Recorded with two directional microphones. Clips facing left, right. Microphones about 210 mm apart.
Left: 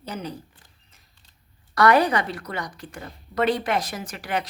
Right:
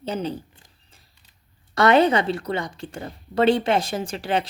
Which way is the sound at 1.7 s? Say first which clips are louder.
Right 2 dB; 25° right (ahead or behind).